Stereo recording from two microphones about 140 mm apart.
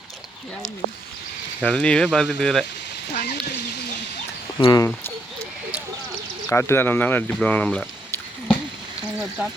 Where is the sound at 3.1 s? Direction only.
75° left (ahead or behind).